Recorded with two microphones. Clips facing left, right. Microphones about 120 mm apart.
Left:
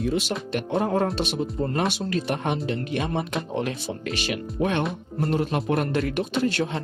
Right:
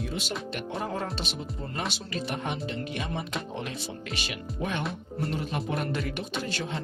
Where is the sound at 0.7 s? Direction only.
60° left (ahead or behind).